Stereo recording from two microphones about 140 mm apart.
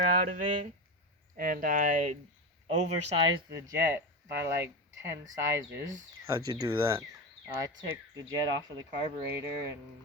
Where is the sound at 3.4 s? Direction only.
25° right (ahead or behind).